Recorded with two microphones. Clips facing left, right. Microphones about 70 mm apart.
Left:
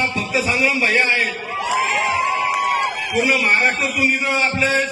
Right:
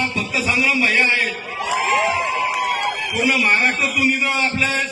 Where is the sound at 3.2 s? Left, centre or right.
Left.